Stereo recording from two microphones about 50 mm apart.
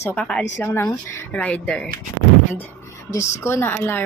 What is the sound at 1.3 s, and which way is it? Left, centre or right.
Speech, left.